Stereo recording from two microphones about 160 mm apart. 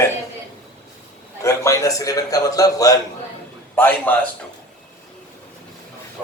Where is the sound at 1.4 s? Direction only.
20° left (ahead or behind).